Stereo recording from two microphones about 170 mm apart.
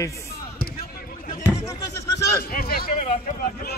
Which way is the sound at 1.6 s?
20° left (ahead or behind).